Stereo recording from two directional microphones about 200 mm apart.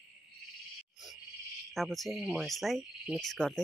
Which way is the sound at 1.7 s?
Centre (ahead or behind).